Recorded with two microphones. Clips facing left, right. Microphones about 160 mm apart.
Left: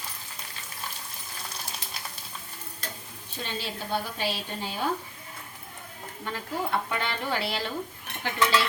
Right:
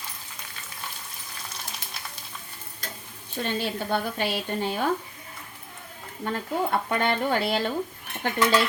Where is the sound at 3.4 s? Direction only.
55° right (ahead or behind).